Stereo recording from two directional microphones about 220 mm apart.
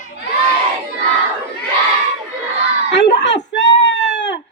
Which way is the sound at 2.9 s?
55° left (ahead or behind).